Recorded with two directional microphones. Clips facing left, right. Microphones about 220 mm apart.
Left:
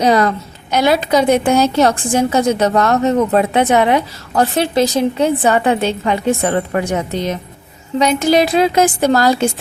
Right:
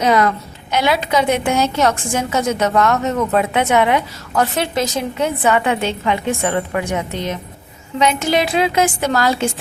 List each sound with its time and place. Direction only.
0.0 s a woman's voice: 35° left (ahead or behind)